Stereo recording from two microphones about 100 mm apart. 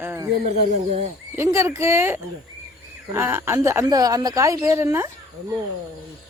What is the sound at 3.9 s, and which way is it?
Speech, 40° right (ahead or behind).